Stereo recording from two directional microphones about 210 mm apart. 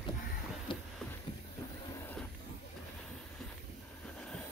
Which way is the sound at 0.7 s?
25° left (ahead or behind).